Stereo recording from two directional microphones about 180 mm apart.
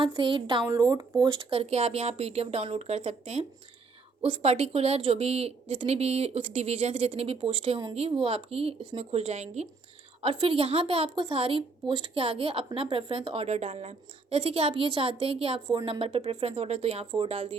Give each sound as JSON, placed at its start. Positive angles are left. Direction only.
{"t": 0.0, "sound": "a woman's voice", "side_deg": -25}
{"t": 0.7, "sound": "speech", "side_deg": -15}
{"t": 1.5, "sound": "a woman's voice", "side_deg": -35}